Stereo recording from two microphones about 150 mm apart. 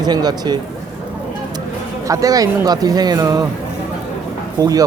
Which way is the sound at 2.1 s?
25° right (ahead or behind).